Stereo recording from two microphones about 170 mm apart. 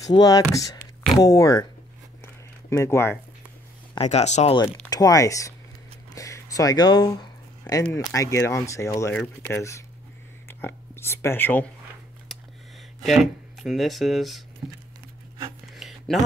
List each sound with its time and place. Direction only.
0.0 s speech: 20° left (ahead or behind)
2.2 s a sound: 15° left (ahead or behind)
4.0 s speech: 40° left (ahead or behind)
4.8 s speech: 20° left (ahead or behind)
6.1 s a sound: 20° left (ahead or behind)
7.9 s speech: 20° left (ahead or behind)
9.1 s speech: 5° left (ahead or behind)
13.0 s speech: centre (ahead or behind)
15.7 s a sound: centre (ahead or behind)